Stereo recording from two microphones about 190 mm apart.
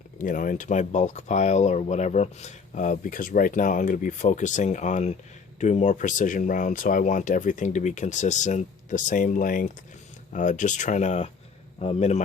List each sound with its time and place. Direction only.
0.2 s speech: 45° left (ahead or behind)